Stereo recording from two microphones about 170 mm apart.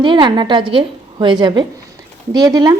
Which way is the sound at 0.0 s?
30° right (ahead or behind).